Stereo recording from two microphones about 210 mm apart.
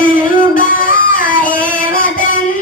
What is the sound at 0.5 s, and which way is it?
Music, 40° left (ahead or behind).